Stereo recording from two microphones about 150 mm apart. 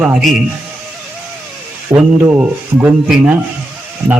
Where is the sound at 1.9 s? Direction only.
15° right (ahead or behind).